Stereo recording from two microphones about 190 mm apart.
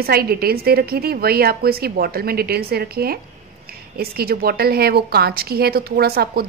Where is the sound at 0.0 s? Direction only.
55° right (ahead or behind).